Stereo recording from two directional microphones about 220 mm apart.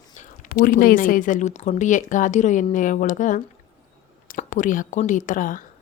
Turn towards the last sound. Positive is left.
turn(degrees=35)  # may be behind; listen again after turning